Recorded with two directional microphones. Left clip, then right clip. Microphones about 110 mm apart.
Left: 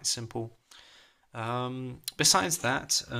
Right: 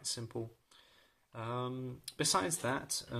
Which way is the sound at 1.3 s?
25° left (ahead or behind).